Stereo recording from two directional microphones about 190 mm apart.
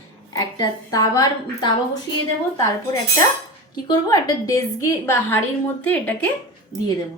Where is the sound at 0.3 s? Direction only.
20° left (ahead or behind).